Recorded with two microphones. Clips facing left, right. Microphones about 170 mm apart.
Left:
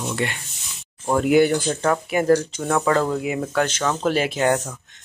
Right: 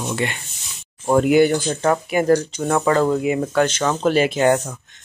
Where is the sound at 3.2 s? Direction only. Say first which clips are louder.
Right 4 dB; 5° left (ahead or behind).